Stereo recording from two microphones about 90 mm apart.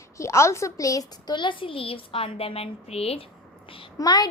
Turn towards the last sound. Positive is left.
turn(degrees=45)  # may be behind; listen again after turning